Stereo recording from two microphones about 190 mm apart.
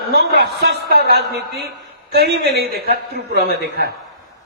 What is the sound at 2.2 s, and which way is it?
A man's voice, 55° right (ahead or behind).